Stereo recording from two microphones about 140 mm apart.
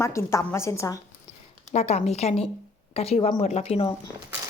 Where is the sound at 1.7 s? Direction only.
50° left (ahead or behind).